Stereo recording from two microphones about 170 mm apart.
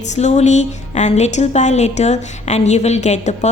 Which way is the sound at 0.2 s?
40° left (ahead or behind).